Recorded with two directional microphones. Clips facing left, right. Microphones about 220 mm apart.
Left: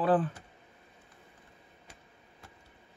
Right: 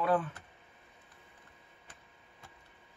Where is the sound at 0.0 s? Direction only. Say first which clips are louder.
Left 4 dB; 35° left (ahead or behind).